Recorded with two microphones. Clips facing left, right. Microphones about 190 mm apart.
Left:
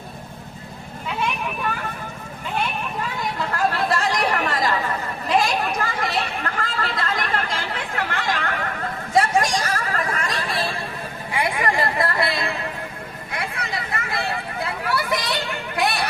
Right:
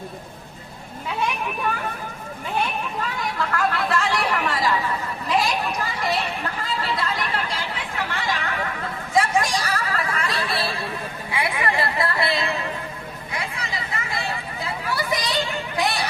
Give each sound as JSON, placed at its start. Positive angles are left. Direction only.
{"t": 3.5, "sound": "chatter", "side_deg": 35}
{"t": 13.3, "sound": "vehicle", "side_deg": 55}